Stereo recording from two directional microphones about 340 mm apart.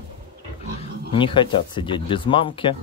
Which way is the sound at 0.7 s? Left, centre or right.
Centre.